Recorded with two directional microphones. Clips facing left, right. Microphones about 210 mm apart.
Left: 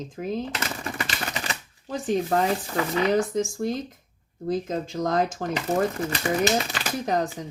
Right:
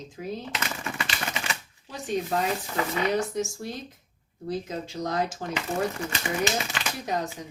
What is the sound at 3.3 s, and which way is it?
Speech, 50° left (ahead or behind).